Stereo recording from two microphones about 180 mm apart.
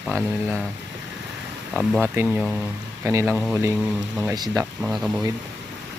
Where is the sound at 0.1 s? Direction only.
5° right (ahead or behind).